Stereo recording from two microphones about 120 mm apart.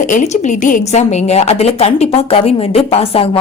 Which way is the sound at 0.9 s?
70° left (ahead or behind).